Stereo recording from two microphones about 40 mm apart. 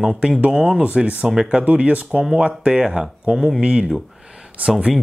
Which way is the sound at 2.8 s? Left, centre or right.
Centre.